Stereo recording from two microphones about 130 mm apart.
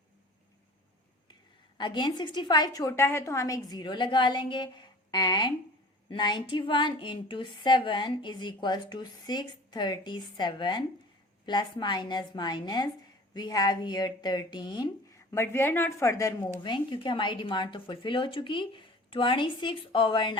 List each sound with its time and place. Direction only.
1.8 s speech: 35° left (ahead or behind)
15.3 s speech: 20° left (ahead or behind)
16.6 s speech: 40° left (ahead or behind)